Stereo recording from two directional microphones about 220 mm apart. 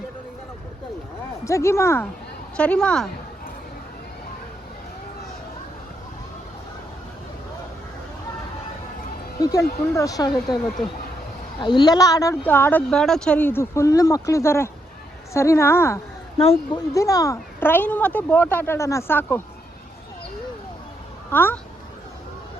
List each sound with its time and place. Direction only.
1.5 s a woman's voice: 15° left (ahead or behind)
9.4 s speech: 15° left (ahead or behind)
11.6 s speech: 20° left (ahead or behind)
16.4 s speech: 25° left (ahead or behind)
16.9 s speech: 15° left (ahead or behind)
21.2 s speech: 10° left (ahead or behind)